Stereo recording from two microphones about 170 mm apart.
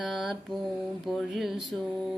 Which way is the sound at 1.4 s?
Centre (ahead or behind).